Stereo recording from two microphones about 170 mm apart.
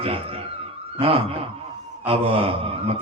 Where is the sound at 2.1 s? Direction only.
35° right (ahead or behind).